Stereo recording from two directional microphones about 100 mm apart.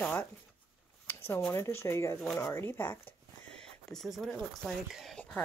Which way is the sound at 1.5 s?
25° left (ahead or behind).